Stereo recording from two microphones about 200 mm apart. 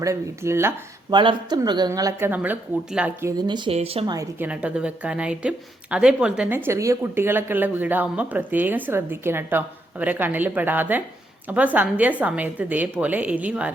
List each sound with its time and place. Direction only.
0.0 s speech: 15° right (ahead or behind)
1.1 s speech: 25° right (ahead or behind)
3.4 s speech: 20° right (ahead or behind); by 13.7 s 5° right (ahead or behind)